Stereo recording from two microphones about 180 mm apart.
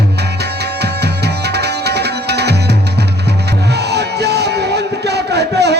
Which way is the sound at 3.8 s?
65° right (ahead or behind).